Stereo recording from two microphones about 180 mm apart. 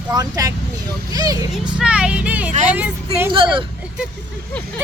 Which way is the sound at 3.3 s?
30° right (ahead or behind).